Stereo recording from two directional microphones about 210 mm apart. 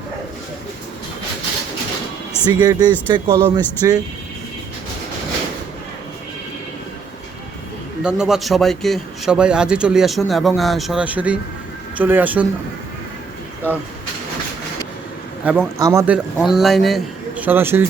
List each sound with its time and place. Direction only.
2.5 s speech: 20° right (ahead or behind)
8.0 s a man's voice: 5° right (ahead or behind)
15.4 s speech: 10° right (ahead or behind)